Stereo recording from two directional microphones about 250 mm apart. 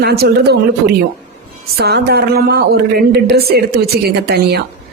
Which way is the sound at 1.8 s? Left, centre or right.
Right.